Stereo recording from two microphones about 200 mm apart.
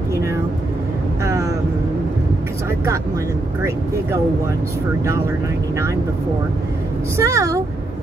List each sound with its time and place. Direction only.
1.2 s vehicle: 15° right (ahead or behind)
7.2 s a woman's voice: 15° right (ahead or behind)